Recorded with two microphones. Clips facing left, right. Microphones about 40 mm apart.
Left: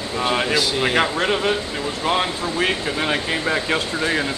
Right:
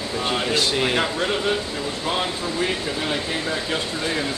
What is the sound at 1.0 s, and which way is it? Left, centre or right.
Speech, left.